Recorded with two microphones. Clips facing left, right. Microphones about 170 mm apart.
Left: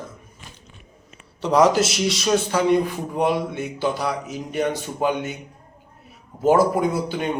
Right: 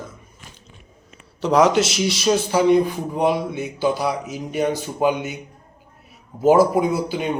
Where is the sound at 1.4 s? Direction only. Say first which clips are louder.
Right 1 dB; centre (ahead or behind).